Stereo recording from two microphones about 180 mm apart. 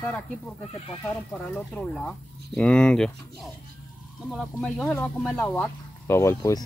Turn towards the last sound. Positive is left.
turn(degrees=15)  # may be behind; listen again after turning